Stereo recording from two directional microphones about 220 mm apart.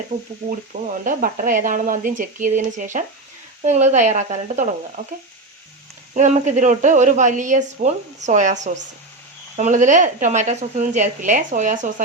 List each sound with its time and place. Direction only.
0.1 s speech: 40° right (ahead or behind)
6.1 s speech: 35° right (ahead or behind)